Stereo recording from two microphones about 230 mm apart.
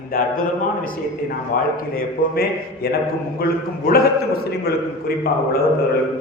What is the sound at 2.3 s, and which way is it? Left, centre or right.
Speech, left.